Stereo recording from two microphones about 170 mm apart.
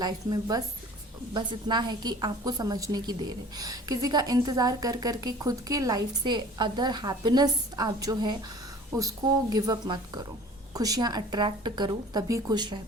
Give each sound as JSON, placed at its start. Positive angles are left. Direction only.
{"t": 0.0, "sound": "a woman's voice", "side_deg": -25}